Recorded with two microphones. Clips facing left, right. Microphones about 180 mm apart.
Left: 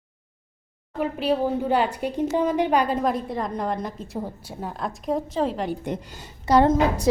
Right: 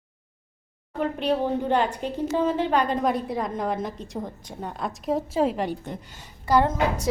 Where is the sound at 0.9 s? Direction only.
5° left (ahead or behind).